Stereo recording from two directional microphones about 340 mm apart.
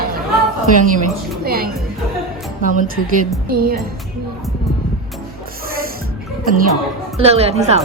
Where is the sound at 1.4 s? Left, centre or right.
Right.